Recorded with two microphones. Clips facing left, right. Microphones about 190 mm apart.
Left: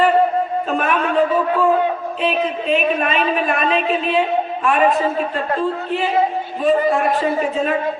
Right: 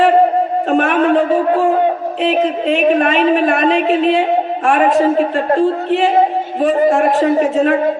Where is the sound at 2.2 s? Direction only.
75° right (ahead or behind).